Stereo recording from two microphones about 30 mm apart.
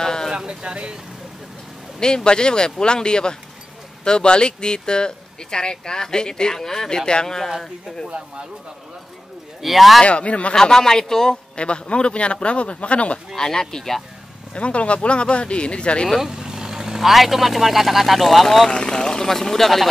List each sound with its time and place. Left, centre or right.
0.0 s sheep: left
0.5 s a sound: right
2.0 s speech: left
9.6 s speech: centre
10.0 s speech: left
10.5 s speech: left
11.5 s speech: left
13.4 s speech: centre
14.5 s speech: left
16.2 s speech: centre
18.7 s speech: left; by 19.9 s centre